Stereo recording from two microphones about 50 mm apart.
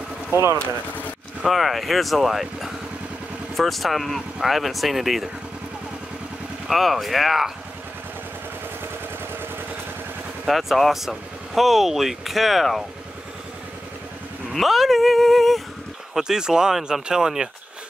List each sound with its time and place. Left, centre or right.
0.3 s speech: right
0.6 s speech: left
1.4 s speech: centre
6.7 s speech: centre
10.4 s speech: centre
14.5 s speech: centre
16.2 s speech: centre